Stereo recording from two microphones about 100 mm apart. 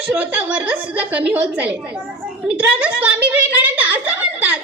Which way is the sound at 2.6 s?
15° right (ahead or behind).